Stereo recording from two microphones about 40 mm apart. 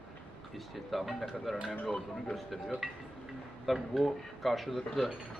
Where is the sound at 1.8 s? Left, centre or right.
Centre.